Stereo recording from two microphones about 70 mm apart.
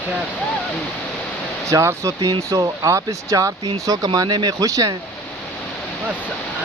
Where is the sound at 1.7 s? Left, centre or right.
Right.